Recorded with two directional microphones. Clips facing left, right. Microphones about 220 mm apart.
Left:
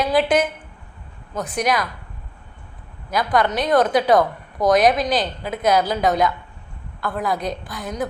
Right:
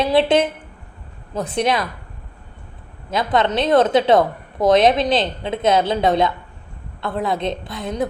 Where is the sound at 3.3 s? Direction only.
25° right (ahead or behind).